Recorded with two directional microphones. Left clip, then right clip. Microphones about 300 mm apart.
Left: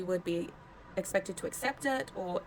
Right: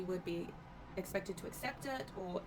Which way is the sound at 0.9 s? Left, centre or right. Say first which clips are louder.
Left 8 dB; left.